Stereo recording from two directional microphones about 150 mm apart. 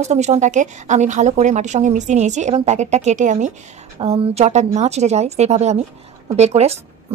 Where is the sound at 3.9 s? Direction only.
40° right (ahead or behind).